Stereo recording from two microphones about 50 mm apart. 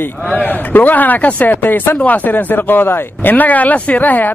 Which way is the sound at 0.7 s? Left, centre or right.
Left.